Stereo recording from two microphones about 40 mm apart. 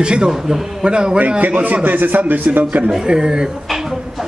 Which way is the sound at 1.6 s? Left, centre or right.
Right.